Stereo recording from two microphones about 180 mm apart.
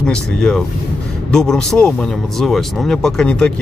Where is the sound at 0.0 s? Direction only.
5° left (ahead or behind).